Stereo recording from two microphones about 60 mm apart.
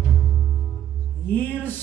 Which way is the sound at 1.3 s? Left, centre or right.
Left.